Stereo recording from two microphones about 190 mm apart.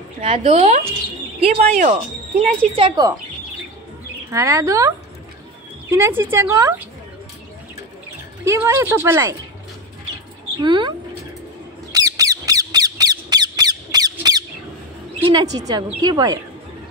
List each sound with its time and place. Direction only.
0.2 s speech: 30° right (ahead or behind)
2.7 s a woman's voice: 25° right (ahead or behind)
4.3 s a woman's voice: 15° right (ahead or behind)
8.5 s a woman's voice: 15° right (ahead or behind)
10.6 s a woman's voice: 25° right (ahead or behind)
11.9 s squawk: 20° right (ahead or behind)
14.1 s squeak: 20° right (ahead or behind)
15.2 s a woman's voice: 25° right (ahead or behind)